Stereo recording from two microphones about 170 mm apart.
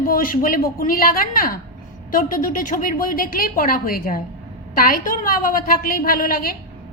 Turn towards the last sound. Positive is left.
turn(degrees=60)  # may be behind; listen again after turning